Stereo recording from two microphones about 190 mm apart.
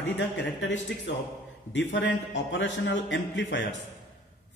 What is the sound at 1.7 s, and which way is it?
A man's voice, 75° left (ahead or behind).